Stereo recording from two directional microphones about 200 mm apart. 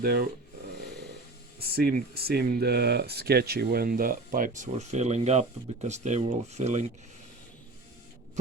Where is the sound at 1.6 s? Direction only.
50° right (ahead or behind).